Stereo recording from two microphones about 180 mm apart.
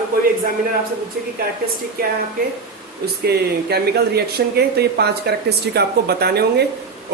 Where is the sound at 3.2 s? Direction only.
60° right (ahead or behind).